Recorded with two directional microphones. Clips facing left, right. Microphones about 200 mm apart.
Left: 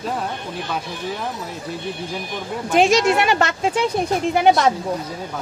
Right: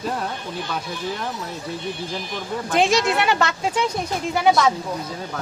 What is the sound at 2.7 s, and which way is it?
Speech, 15° left (ahead or behind).